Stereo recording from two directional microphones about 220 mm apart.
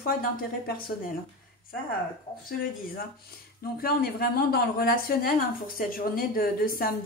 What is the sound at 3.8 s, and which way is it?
A woman's voice, 40° left (ahead or behind).